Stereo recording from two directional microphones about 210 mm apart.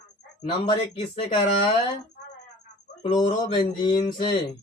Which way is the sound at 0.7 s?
30° left (ahead or behind).